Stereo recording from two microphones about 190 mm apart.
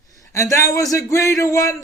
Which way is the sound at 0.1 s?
15° left (ahead or behind).